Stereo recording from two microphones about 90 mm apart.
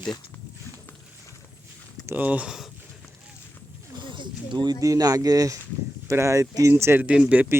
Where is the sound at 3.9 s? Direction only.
60° right (ahead or behind); by 7.1 s 25° right (ahead or behind).